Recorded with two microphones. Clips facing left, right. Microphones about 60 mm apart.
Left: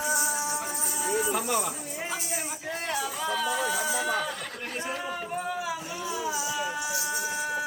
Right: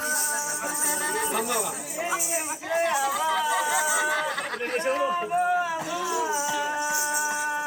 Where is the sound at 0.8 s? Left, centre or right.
Right.